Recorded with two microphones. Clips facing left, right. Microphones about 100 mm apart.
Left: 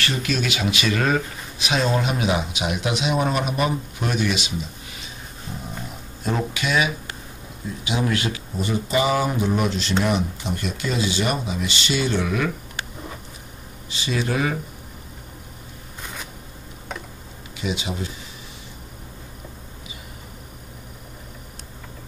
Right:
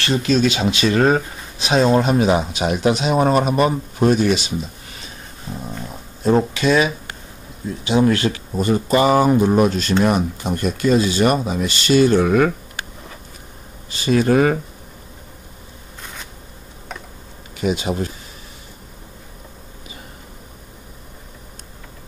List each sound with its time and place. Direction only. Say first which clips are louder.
0.0 s speech: right 8 dB; 30° right (ahead or behind)
6.2 s speech: right 9 dB; 35° right (ahead or behind)
13.8 s speech: right 9 dB; 50° right (ahead or behind)
17.6 s speech: right 7 dB; 45° right (ahead or behind)